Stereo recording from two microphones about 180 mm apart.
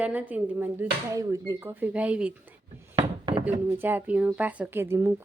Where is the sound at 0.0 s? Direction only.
10° right (ahead or behind).